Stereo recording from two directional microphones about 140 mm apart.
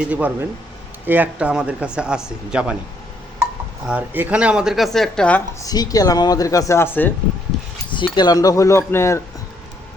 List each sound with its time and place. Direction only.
0.1 s speech: 10° right (ahead or behind)
3.8 s speech: 10° right (ahead or behind); by 5.4 s 5° left (ahead or behind)
5.5 s speech: 25° left (ahead or behind)
7.5 s a sound: 5° left (ahead or behind)
7.9 s speech: 30° left (ahead or behind)